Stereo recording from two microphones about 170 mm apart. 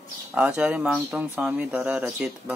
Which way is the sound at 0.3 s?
5° right (ahead or behind).